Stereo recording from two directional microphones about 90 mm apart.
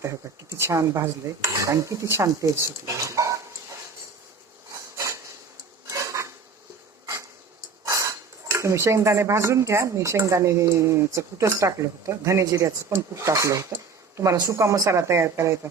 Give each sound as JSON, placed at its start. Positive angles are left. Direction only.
{"t": 0.0, "sound": "speech", "side_deg": -30}
{"t": 5.9, "sound": "dishes", "side_deg": -35}
{"t": 7.0, "sound": "a sound", "side_deg": -35}
{"t": 8.5, "sound": "speech", "side_deg": -35}